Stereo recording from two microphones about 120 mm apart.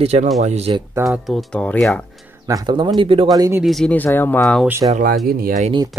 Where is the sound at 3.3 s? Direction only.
30° right (ahead or behind).